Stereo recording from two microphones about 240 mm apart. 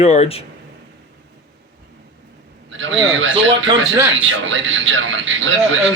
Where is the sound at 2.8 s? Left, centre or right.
Right.